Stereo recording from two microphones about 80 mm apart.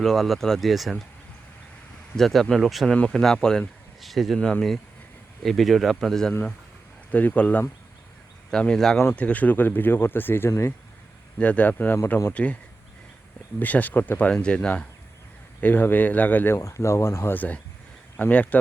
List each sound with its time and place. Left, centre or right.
0.0 s speech: centre
2.1 s speech: centre
4.4 s speech: centre
5.4 s speech: centre
7.1 s speech: centre
8.4 s speech: centre
9.0 s speech: centre
13.6 s speech: left
15.6 s speech: left
16.6 s speech: left
17.3 s speech: centre